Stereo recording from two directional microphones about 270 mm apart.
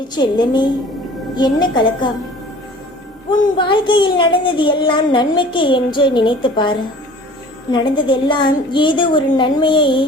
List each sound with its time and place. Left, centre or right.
0.2 s a child's voice: centre
3.2 s a child's voice: centre